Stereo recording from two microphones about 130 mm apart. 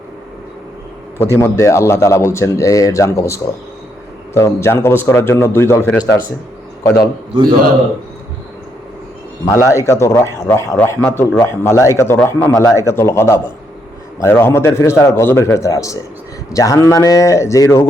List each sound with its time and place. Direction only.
1.4 s a man's voice: 20° left (ahead or behind)
9.5 s a man's voice: 25° left (ahead or behind)